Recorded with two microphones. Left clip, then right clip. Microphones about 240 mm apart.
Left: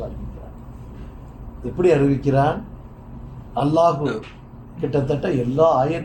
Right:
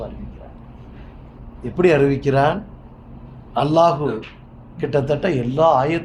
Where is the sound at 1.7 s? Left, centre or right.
Right.